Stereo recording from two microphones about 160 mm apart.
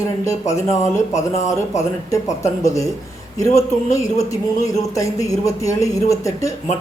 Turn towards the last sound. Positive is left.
turn(degrees=20)  # may be behind; listen again after turning